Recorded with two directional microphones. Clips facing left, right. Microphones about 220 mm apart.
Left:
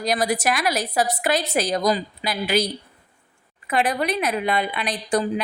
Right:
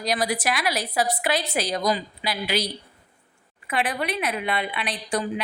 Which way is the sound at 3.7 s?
40° left (ahead or behind).